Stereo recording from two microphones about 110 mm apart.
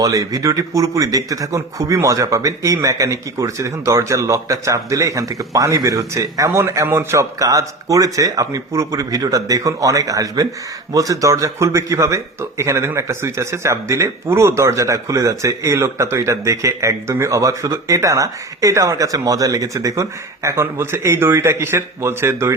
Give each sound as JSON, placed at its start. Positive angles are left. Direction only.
{"t": 0.0, "sound": "speech", "side_deg": -35}